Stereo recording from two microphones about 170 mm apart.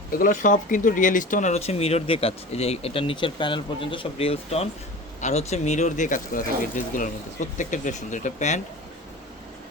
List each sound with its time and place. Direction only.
0.2 s speech: 50° left (ahead or behind)